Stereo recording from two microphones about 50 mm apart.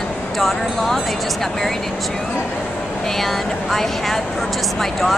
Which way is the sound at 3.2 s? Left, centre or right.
Centre.